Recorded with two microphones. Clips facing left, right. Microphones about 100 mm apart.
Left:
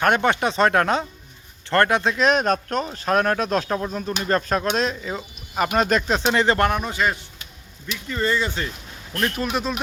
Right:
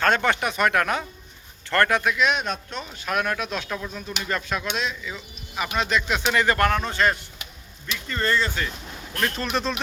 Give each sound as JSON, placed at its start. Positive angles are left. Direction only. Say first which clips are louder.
{"t": 0.0, "sound": "speech", "louder": "left 2 dB", "side_deg": 20}
{"t": 2.1, "sound": "speech", "louder": "left 5 dB", "side_deg": 40}